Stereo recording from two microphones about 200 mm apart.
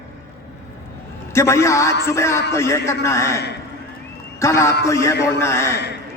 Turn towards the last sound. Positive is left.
turn(degrees=15)  # may be behind; listen again after turning